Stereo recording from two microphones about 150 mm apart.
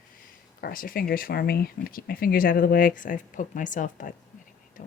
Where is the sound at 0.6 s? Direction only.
70° left (ahead or behind).